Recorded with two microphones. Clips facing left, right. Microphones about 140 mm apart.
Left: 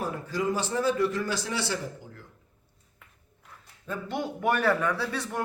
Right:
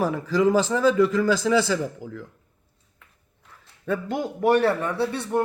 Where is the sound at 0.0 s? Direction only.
90° right.